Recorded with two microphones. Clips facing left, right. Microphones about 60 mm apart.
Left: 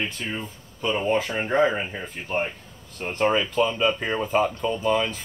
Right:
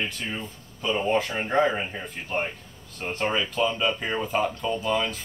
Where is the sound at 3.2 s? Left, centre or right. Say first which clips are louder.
Left 4 dB; centre.